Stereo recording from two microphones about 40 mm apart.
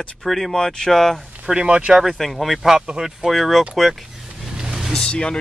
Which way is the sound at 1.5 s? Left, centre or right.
Centre.